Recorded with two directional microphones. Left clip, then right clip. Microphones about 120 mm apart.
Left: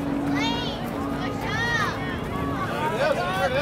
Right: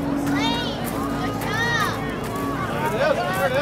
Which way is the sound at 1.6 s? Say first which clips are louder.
Right 3 dB; 5° right (ahead or behind).